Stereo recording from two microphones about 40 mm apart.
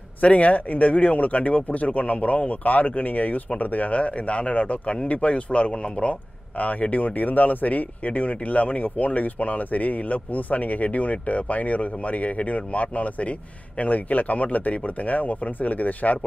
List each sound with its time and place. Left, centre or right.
0.2 s speech: left
6.6 s speech: left